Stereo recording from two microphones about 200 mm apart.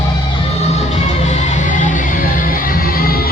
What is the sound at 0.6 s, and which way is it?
Music, 35° left (ahead or behind).